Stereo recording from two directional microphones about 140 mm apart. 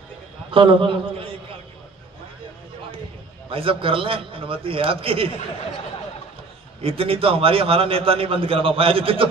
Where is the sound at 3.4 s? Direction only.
40° right (ahead or behind).